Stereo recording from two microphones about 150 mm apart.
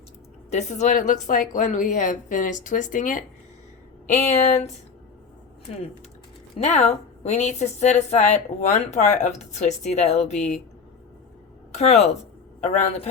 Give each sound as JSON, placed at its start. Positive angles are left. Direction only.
{"t": 0.5, "sound": "a woman's voice", "side_deg": 50}
{"t": 6.6, "sound": "a woman's voice", "side_deg": 50}
{"t": 11.7, "sound": "a woman's voice", "side_deg": 50}